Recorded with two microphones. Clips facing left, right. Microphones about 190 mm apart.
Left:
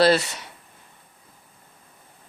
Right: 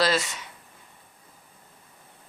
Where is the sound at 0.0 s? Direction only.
60° left (ahead or behind).